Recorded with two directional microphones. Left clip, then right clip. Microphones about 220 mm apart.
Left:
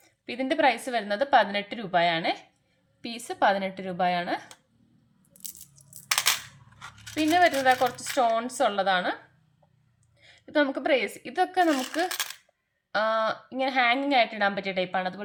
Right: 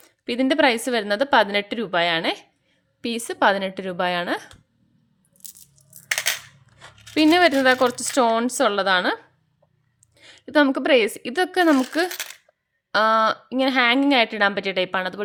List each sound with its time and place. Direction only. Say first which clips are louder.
0.0 s a woman's voice: right 9 dB; 50° right (ahead or behind)
5.4 s a sound: even; centre (ahead or behind)
7.1 s a woman's voice: right 6 dB; 55° right (ahead or behind)
10.2 s a woman's voice: right 6 dB; 50° right (ahead or behind)